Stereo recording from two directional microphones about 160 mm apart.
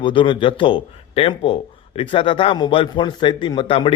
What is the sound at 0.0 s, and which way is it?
A man's voice, 30° left (ahead or behind).